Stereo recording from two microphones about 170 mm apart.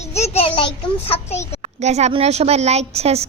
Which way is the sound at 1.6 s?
40° right (ahead or behind).